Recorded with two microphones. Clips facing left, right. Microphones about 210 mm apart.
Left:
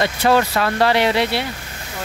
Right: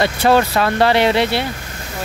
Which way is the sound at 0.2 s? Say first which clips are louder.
Right 2 dB; 35° right (ahead or behind).